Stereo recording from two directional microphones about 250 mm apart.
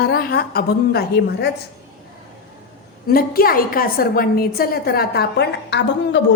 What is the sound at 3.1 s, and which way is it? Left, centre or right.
A woman's voice, left.